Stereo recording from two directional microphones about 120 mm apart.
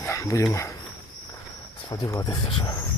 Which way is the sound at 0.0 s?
25° left (ahead or behind).